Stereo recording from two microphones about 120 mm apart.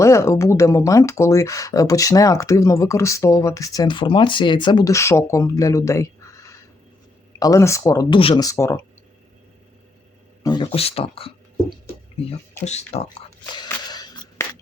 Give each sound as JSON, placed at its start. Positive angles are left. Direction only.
{"t": 0.0, "sound": "speech", "side_deg": 25}
{"t": 4.9, "sound": "speech", "side_deg": 25}
{"t": 8.1, "sound": "speech", "side_deg": 50}
{"t": 8.4, "sound": "speech", "side_deg": 25}
{"t": 10.4, "sound": "speech", "side_deg": 35}
{"t": 10.7, "sound": "speech", "side_deg": 55}
{"t": 12.6, "sound": "speech", "side_deg": 65}
{"t": 14.4, "sound": "a sound", "side_deg": 25}